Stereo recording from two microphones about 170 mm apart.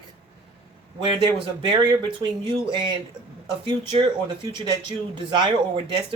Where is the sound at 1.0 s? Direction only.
30° right (ahead or behind).